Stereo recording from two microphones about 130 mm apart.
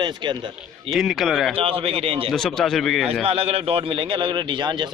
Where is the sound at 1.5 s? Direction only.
45° right (ahead or behind).